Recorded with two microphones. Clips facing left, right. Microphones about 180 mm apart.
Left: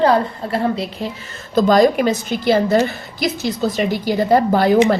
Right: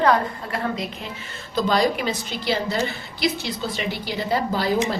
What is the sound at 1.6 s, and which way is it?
A woman's voice, 45° left (ahead or behind).